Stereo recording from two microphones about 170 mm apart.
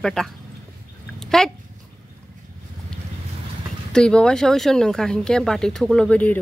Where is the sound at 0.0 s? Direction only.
5° left (ahead or behind).